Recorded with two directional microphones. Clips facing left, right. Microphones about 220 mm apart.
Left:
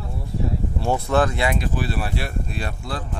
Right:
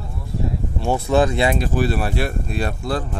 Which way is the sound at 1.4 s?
30° right (ahead or behind).